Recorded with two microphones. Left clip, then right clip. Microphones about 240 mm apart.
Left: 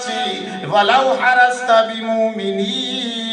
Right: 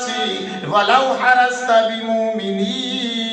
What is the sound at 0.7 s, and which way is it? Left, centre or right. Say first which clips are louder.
A man's voice: left 1 dB; left.